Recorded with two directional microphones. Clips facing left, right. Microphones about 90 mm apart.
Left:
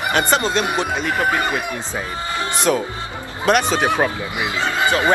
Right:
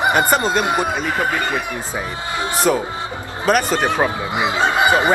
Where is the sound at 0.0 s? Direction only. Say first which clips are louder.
Right 2 dB; 10° right (ahead or behind).